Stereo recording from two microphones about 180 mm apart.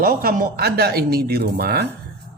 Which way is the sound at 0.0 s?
55° right (ahead or behind).